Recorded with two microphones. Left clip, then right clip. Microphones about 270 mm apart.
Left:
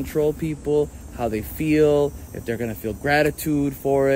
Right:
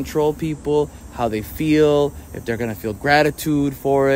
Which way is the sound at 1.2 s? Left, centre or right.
Centre.